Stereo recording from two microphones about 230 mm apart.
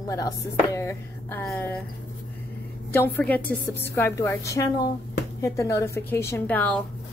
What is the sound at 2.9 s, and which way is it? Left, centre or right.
Speech, centre.